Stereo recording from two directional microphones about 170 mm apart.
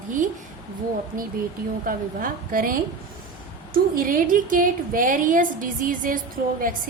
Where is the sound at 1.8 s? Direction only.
55° right (ahead or behind).